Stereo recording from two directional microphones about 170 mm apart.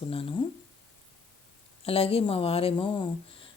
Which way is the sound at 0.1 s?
35° left (ahead or behind).